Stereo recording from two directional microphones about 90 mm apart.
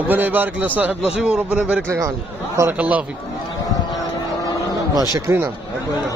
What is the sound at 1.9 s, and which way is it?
Speech, 35° right (ahead or behind).